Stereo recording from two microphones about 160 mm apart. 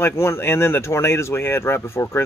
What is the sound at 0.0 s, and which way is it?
Speech, 15° left (ahead or behind).